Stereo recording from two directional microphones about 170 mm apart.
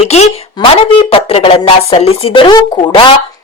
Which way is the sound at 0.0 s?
40° left (ahead or behind).